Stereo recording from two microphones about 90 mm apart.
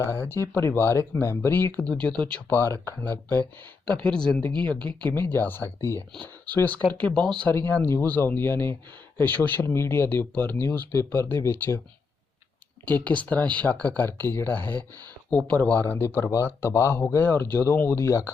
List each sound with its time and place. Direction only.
0.0 s speech: 30° left (ahead or behind)
1.9 s speech: 10° left (ahead or behind)
2.5 s speech: 25° left (ahead or behind)
6.4 s speech: 20° left (ahead or behind)
7.4 s speech: 20° left (ahead or behind)
12.8 s speech: 15° left (ahead or behind)